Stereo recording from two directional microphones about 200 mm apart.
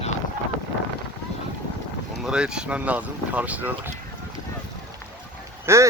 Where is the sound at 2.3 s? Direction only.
5° right (ahead or behind).